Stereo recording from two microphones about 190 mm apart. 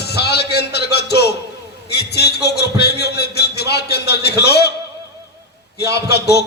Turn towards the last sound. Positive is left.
turn(degrees=60)  # may be behind; listen again after turning